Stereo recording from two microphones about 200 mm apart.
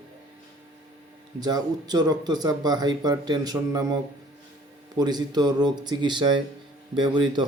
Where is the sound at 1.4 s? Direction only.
20° right (ahead or behind).